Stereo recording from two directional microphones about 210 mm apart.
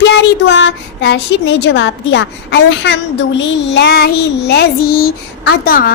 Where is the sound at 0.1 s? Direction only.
55° left (ahead or behind).